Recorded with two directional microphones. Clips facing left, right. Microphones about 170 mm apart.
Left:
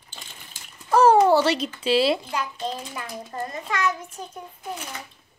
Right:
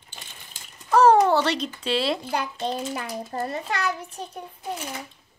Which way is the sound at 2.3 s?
30° right (ahead or behind).